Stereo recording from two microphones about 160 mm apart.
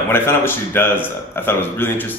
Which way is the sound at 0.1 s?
15° left (ahead or behind).